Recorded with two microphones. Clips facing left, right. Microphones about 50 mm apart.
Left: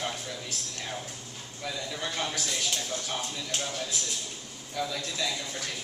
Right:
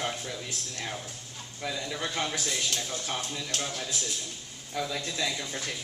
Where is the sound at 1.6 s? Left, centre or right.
Centre.